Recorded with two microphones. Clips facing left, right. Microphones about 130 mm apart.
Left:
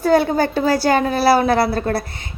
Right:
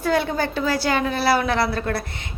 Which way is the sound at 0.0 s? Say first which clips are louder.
Left 6 dB; 40° left (ahead or behind).